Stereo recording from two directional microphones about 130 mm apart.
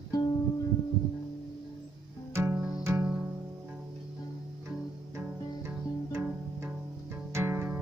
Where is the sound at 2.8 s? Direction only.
15° right (ahead or behind).